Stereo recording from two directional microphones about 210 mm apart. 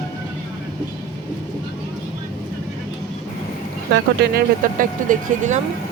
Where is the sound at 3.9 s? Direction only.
50° right (ahead or behind).